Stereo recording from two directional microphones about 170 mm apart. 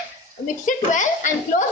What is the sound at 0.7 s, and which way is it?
Speech, 50° left (ahead or behind).